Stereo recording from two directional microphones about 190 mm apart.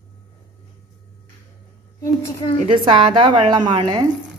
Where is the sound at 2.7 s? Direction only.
25° right (ahead or behind).